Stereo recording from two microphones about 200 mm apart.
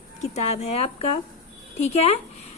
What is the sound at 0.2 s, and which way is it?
A woman's voice, 30° left (ahead or behind).